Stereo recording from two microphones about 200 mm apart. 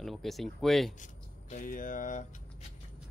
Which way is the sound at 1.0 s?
40° left (ahead or behind).